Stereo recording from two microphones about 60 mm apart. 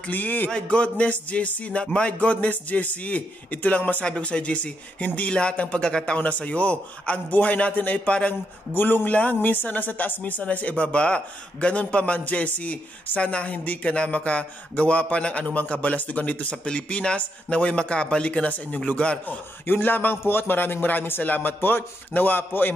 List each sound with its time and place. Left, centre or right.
0.1 s a man's voice: left
0.5 s speech: centre
19.6 s a man's voice: left